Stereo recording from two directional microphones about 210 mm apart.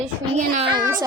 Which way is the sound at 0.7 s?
20° right (ahead or behind).